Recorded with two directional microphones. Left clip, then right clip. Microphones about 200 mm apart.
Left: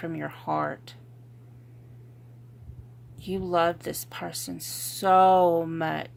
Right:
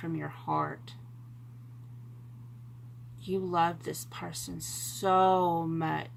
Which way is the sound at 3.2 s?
50° left (ahead or behind).